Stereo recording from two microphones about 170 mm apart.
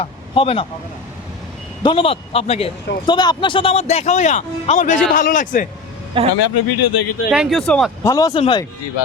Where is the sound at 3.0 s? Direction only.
25° left (ahead or behind); by 5.7 s 50° left (ahead or behind).